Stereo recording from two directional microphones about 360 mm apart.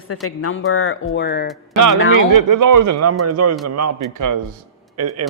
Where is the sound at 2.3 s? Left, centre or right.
Right.